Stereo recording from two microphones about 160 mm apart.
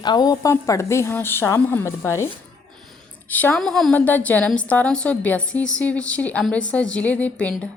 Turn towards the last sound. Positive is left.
turn(degrees=10)  # may be behind; listen again after turning